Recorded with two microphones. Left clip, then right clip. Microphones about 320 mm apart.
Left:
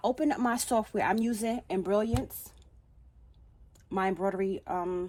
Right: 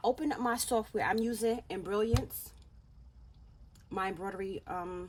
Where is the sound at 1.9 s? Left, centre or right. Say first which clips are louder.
Left 2 dB; left.